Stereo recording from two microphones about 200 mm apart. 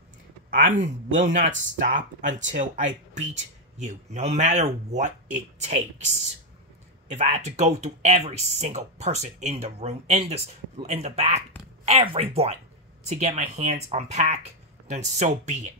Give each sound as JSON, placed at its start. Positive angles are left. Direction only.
{"t": 0.7, "sound": "speech", "side_deg": -40}